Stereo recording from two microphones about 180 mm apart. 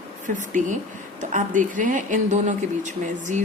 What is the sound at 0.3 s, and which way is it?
Speech, 45° right (ahead or behind).